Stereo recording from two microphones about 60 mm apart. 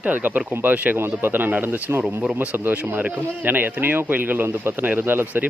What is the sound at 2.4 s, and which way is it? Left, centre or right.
Speech, right.